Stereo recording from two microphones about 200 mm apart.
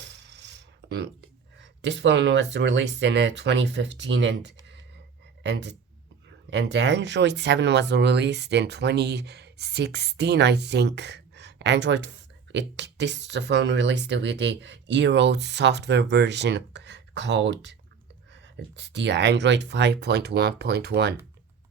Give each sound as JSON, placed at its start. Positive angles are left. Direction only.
{"t": 0.0, "sound": "coin", "side_deg": -60}
{"t": 1.5, "sound": "speech", "side_deg": -60}
{"t": 18.8, "sound": "speech", "side_deg": -60}